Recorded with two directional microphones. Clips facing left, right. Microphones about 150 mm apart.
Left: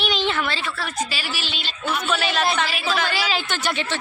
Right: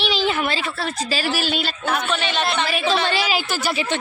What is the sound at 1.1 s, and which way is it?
Speech, 45° right (ahead or behind).